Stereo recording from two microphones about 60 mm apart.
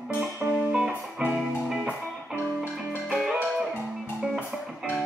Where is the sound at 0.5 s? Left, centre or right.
Right.